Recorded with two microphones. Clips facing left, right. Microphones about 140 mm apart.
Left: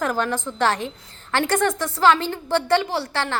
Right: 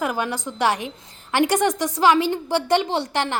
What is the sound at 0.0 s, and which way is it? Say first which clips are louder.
A woman's voice: left 1 dB; 10° right (ahead or behind).